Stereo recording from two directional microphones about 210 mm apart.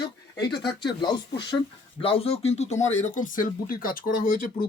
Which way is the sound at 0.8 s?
20° left (ahead or behind).